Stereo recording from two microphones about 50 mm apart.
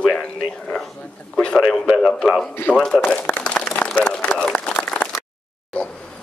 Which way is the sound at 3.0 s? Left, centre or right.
Left.